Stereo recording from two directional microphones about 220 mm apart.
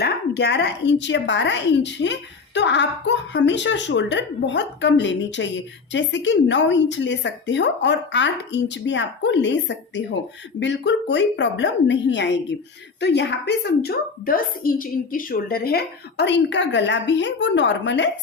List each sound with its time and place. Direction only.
0.0 s a woman's voice: 50° left (ahead or behind)